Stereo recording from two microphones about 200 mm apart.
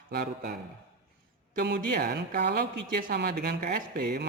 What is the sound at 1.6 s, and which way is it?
A woman's voice, 50° right (ahead or behind).